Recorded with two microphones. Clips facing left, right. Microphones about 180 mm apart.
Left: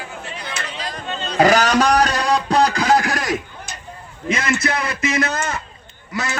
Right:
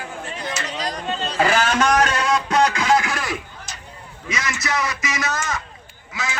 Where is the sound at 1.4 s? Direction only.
40° left (ahead or behind).